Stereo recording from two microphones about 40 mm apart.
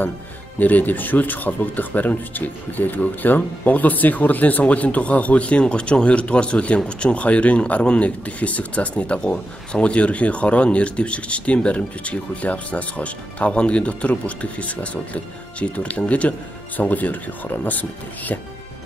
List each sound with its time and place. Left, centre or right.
0.6 s speech: left
16.8 s speech: left